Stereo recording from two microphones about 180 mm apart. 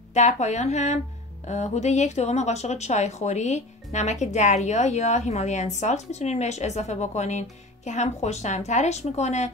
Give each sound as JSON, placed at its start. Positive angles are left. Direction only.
{"t": 0.1, "sound": "speech", "side_deg": 40}